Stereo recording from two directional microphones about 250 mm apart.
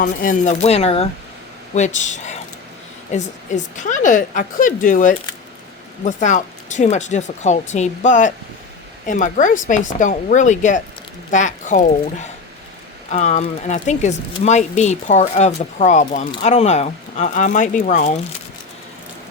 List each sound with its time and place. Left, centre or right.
0.0 s a woman's voice: left